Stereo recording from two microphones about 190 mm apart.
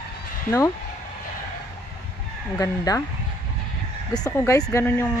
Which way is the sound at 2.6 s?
20° left (ahead or behind).